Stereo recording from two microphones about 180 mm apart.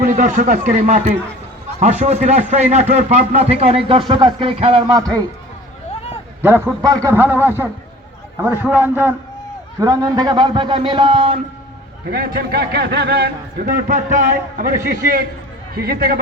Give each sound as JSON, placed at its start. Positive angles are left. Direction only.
{"t": 0.0, "sound": "a man's voice", "side_deg": -45}
{"t": 6.4, "sound": "a man's voice", "side_deg": -15}
{"t": 12.0, "sound": "a man's voice", "side_deg": -55}